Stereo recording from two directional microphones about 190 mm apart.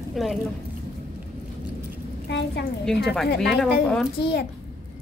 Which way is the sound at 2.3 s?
65° left (ahead or behind).